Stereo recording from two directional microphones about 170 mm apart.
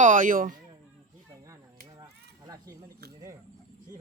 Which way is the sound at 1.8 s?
25° right (ahead or behind).